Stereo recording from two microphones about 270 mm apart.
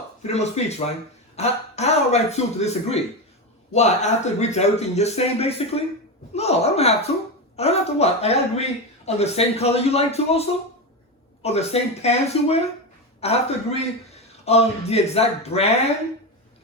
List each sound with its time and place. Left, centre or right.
0.2 s speech: left